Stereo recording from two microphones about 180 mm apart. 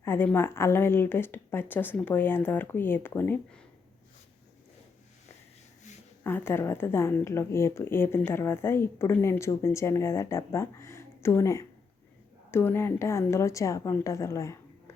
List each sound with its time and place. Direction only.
0.0 s a woman's voice: 10° left (ahead or behind)
6.2 s a woman's voice: 10° left (ahead or behind)